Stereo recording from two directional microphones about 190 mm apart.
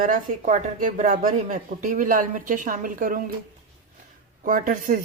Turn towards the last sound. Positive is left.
turn(degrees=-45)  # may be behind; listen again after turning